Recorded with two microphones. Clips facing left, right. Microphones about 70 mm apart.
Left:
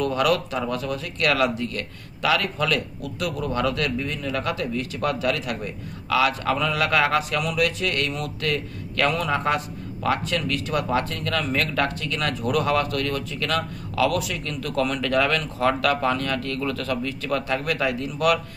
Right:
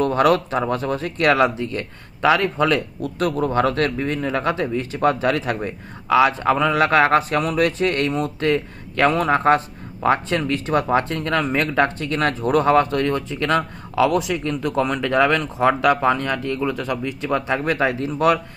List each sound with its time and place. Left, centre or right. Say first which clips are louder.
0.0 s a man's voice: right 5 dB; right
3.2 s a man's voice: right 6 dB; right